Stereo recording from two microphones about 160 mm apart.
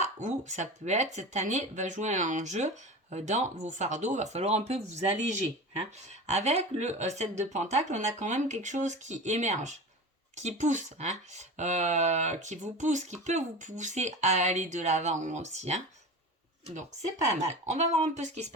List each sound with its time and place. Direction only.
0.0 s speech: 50° right (ahead or behind)
17.2 s speech: 45° right (ahead or behind)